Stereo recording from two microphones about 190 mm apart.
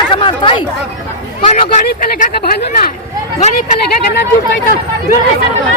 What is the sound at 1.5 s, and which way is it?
Speech, 45° left (ahead or behind).